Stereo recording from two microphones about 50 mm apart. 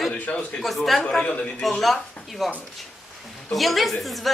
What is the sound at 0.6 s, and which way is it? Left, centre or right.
Speech, centre.